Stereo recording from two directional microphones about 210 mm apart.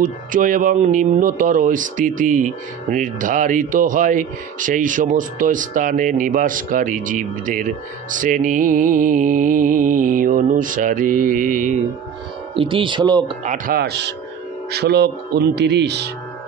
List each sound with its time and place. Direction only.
0.0 s speech: 40° right (ahead or behind)
12.5 s speech: 25° right (ahead or behind)
13.4 s speech: 40° right (ahead or behind)